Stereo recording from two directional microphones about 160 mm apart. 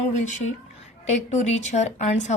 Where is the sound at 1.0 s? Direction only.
45° left (ahead or behind).